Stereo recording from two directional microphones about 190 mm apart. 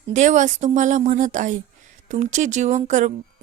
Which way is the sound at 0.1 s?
40° right (ahead or behind).